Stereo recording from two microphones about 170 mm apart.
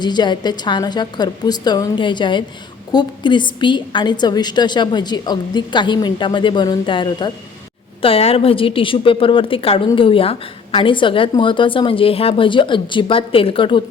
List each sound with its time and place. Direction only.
0.0 s a woman's voice: 25° left (ahead or behind)